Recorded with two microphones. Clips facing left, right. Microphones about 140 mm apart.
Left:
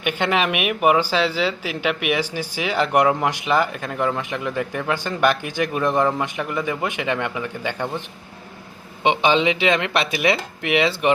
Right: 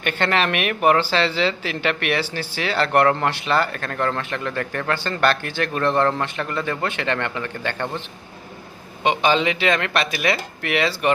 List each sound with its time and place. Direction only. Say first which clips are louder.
0.0 s speech: even; 10° left (ahead or behind)
9.0 s speech: left 1 dB; 20° left (ahead or behind)